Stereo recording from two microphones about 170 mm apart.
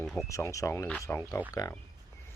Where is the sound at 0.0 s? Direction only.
5° left (ahead or behind).